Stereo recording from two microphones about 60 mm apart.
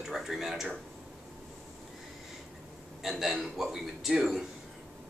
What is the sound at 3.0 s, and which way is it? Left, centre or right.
Speech, centre.